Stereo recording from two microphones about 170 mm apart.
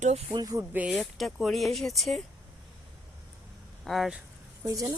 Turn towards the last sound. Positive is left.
turn(degrees=-20)  # may be behind; listen again after turning